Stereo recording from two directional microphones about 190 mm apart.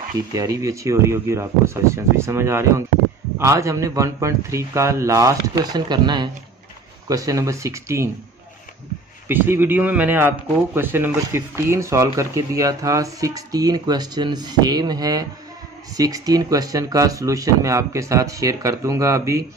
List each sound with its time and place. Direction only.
0.3 s a man's voice: 20° right (ahead or behind)
9.3 s a man's voice: 10° right (ahead or behind)